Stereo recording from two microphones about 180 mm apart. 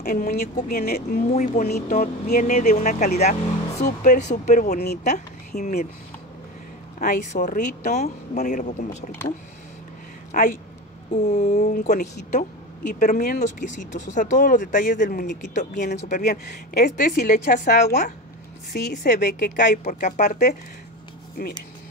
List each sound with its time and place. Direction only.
0.0 s a woman's voice: 55° left (ahead or behind)
1.3 s a woman's voice: 40° left (ahead or behind)
7.0 s a woman's voice: 45° left (ahead or behind)
10.3 s a woman's voice: 50° left (ahead or behind)
11.1 s a woman's voice: 40° left (ahead or behind); by 15.5 s 60° left (ahead or behind)
15.5 s a woman's voice: 45° left (ahead or behind)
16.2 s speech: 60° left (ahead or behind)
16.8 s a woman's voice: 45° left (ahead or behind)
17.7 s speech: 40° left (ahead or behind)
18.7 s speech: 55° left (ahead or behind)